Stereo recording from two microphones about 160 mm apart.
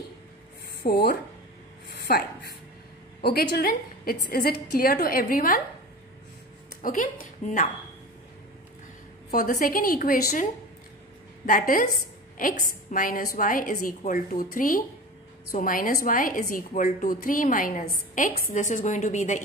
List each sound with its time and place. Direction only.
0.8 s a woman's voice: 80° left; by 5.6 s 60° left (ahead or behind)
6.7 s a woman's voice: 60° left (ahead or behind)
9.3 s a woman's voice: 60° left (ahead or behind)
11.4 s a woman's voice: 60° left (ahead or behind)
12.9 s a woman's voice: 60° left (ahead or behind)